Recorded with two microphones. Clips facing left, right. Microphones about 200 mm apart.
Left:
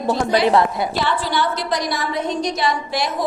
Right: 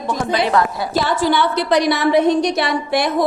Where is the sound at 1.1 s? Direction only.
45° right (ahead or behind).